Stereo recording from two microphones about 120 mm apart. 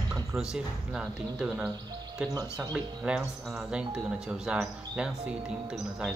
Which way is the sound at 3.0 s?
10° right (ahead or behind).